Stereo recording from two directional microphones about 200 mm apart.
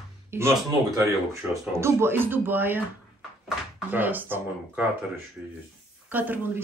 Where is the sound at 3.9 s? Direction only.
10° right (ahead or behind).